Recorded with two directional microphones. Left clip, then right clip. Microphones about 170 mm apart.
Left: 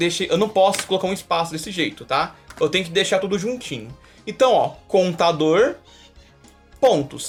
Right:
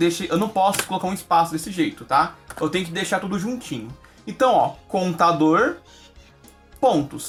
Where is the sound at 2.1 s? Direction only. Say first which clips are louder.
Right 5 dB; 30° left (ahead or behind).